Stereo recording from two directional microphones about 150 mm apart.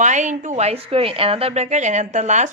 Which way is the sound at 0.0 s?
55° right (ahead or behind).